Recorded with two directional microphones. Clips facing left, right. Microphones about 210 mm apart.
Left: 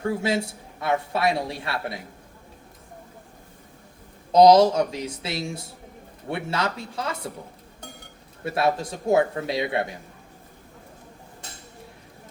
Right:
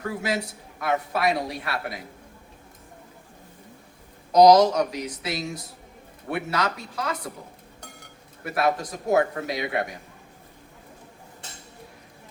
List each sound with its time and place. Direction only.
0.0 s a man's voice: 25° left (ahead or behind)
4.3 s a man's voice: 25° left (ahead or behind)
8.4 s a man's voice: 25° left (ahead or behind)